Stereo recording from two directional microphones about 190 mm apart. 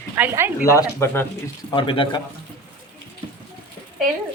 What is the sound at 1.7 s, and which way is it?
Speech, 25° left (ahead or behind).